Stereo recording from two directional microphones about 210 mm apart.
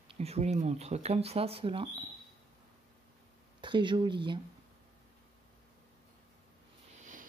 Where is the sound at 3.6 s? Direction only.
20° right (ahead or behind).